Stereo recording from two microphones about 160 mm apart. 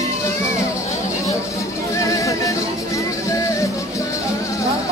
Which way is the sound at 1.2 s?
20° left (ahead or behind).